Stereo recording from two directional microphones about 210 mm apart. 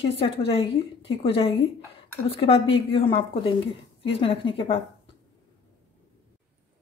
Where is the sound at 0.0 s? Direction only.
25° left (ahead or behind).